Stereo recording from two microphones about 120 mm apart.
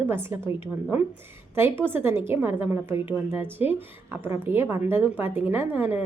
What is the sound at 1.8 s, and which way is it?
A woman's voice, 20° right (ahead or behind).